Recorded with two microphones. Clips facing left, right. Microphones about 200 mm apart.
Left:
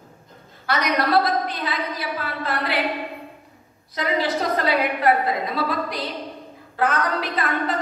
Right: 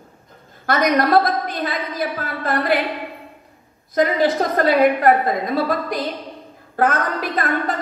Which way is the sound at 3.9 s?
45° right (ahead or behind).